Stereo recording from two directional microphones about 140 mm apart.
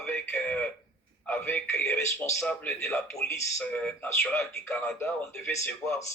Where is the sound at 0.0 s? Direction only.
15° left (ahead or behind).